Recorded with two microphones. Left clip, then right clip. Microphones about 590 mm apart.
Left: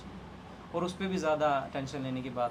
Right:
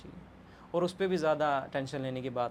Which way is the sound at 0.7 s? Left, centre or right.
Right.